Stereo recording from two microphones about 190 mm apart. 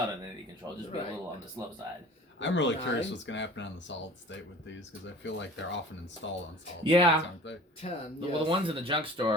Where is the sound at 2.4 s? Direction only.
70° left (ahead or behind).